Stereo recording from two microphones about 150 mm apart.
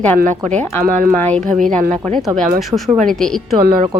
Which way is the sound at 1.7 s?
60° right (ahead or behind).